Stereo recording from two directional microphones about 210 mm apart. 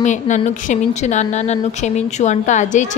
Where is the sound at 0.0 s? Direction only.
35° left (ahead or behind).